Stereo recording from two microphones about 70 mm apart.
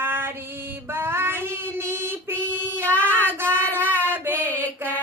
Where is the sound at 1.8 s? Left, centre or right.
Right.